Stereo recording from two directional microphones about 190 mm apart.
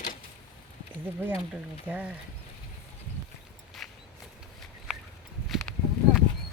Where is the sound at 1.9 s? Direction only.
10° right (ahead or behind).